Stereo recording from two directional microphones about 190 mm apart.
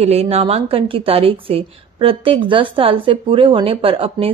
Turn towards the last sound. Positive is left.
turn(degrees=-30)  # may be behind; listen again after turning